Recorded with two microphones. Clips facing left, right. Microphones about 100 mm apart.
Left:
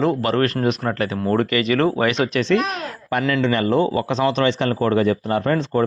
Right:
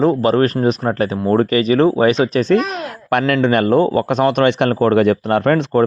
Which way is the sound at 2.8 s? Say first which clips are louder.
Right 5 dB; 75° right (ahead or behind).